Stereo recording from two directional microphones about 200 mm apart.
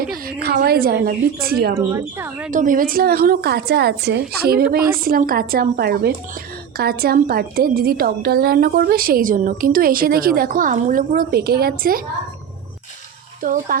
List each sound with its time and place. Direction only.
0.0 s a woman's voice: 45° right (ahead or behind)
1.7 s speech: 10° right (ahead or behind)
2.5 s a woman's voice: 40° right (ahead or behind)
13.4 s a woman's voice: 45° right (ahead or behind)